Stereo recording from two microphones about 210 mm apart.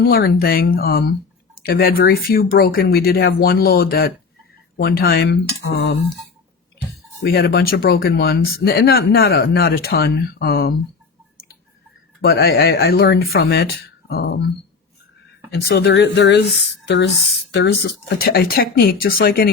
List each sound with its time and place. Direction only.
0.0 s speech: 45° left (ahead or behind)
7.2 s speech: 50° left (ahead or behind)
12.2 s speech: 45° left (ahead or behind)
15.4 s speech: 50° left (ahead or behind)